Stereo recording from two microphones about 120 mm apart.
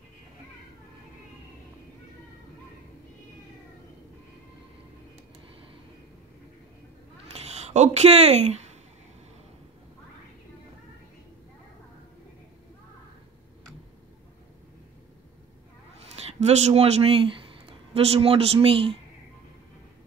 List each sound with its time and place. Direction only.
7.3 s speech: 65° right (ahead or behind)
16.2 s speech: 65° right (ahead or behind); by 18.9 s 50° right (ahead or behind)